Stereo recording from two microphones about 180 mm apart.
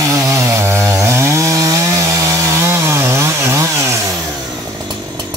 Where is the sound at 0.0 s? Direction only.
15° right (ahead or behind).